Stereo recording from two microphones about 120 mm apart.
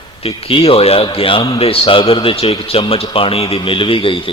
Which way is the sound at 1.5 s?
55° left (ahead or behind).